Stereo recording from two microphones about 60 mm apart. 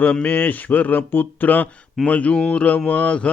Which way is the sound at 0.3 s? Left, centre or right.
Left.